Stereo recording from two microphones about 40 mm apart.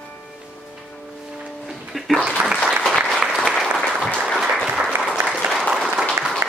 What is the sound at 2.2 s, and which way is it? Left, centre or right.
Applause, right.